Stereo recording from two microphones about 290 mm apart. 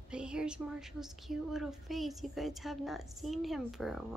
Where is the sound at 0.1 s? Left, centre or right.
Centre.